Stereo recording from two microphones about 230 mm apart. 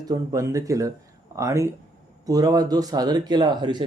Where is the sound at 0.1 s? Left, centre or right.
Centre.